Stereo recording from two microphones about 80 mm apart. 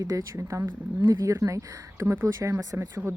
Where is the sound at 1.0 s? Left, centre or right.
Right.